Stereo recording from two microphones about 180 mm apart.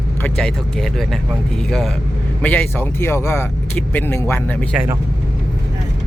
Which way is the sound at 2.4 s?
10° left (ahead or behind).